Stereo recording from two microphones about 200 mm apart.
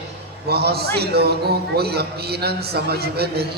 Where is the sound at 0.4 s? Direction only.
50° right (ahead or behind).